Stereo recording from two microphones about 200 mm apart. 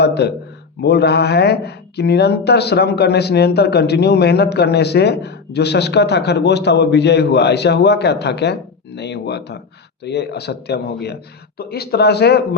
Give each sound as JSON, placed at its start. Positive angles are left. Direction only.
{"t": 0.0, "sound": "speech", "side_deg": 55}